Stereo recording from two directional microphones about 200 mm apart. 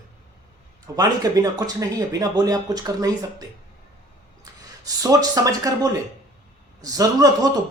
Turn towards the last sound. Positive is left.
turn(degrees=-20)  # may be behind; listen again after turning